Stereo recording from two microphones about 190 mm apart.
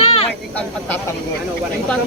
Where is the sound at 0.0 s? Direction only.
30° left (ahead or behind).